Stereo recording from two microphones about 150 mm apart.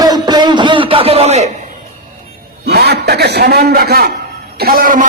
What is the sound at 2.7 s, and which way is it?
A man's voice, 90° right.